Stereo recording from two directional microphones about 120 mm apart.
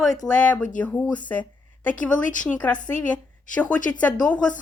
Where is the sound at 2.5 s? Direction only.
10° left (ahead or behind).